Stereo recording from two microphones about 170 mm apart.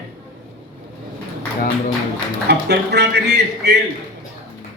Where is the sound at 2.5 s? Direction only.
80° right.